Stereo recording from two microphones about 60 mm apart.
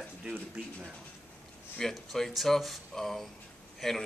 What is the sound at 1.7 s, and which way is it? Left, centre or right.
Speech, centre.